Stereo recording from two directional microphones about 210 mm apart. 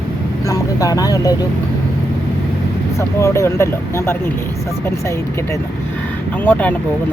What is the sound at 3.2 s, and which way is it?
Speech, 15° left (ahead or behind).